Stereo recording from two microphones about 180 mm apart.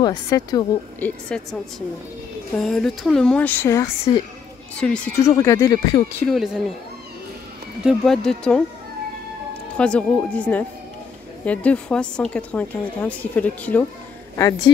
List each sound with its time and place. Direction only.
0.0 s speech: 25° left (ahead or behind)
0.9 s speech: 5° left (ahead or behind)
5.2 s speech: 15° left (ahead or behind)
6.2 s speech: centre (ahead or behind)
7.8 s speech: centre (ahead or behind)
9.8 s speech: 5° left (ahead or behind)